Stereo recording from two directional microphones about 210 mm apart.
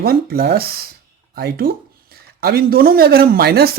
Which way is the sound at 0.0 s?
45° right (ahead or behind).